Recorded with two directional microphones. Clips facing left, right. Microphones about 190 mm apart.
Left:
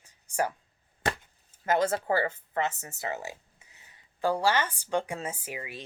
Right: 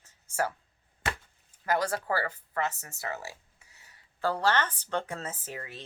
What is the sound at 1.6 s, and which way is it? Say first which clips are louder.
Speech: left 3 dB; 20° left (ahead or behind).